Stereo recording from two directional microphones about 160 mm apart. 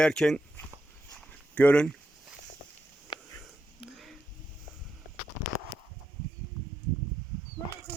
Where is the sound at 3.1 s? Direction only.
30° left (ahead or behind).